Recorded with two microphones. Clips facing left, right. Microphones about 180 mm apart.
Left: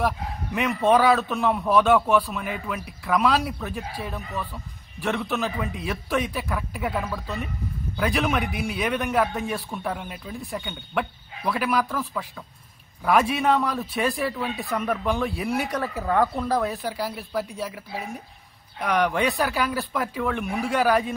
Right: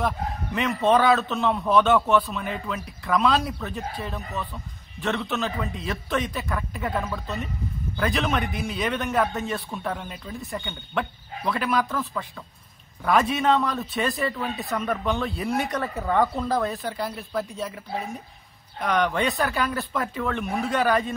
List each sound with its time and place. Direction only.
0.6 s speech: 10° left (ahead or behind)